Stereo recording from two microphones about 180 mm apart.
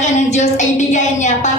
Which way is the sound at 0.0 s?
40° left (ahead or behind).